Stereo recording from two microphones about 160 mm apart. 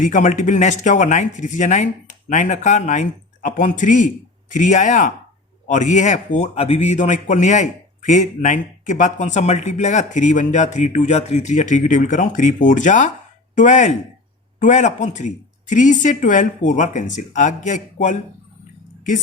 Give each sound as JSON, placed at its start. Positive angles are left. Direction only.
{"t": 0.0, "sound": "a man's voice", "side_deg": 55}